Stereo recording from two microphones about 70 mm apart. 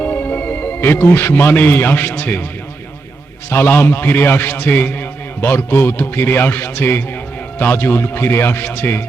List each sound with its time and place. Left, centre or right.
0.0 s a man's voice: left
3.5 s a man's voice: left